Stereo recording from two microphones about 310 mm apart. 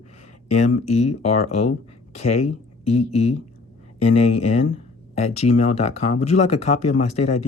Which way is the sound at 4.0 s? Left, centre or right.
Left.